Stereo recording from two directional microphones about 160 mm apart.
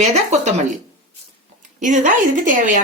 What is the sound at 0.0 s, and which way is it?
Speech, 45° right (ahead or behind).